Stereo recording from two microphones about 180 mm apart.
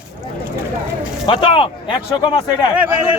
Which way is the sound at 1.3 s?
25° left (ahead or behind).